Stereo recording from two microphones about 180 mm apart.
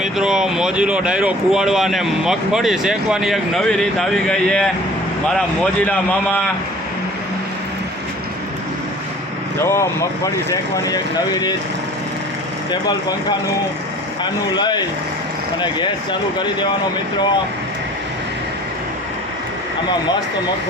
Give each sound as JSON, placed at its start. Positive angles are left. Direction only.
{"t": 0.0, "sound": "speech", "side_deg": -5}
{"t": 5.8, "sound": "speech", "side_deg": 10}
{"t": 9.6, "sound": "speech", "side_deg": 15}
{"t": 14.5, "sound": "speech", "side_deg": 25}